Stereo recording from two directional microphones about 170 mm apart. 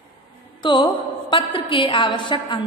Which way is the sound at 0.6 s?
30° left (ahead or behind).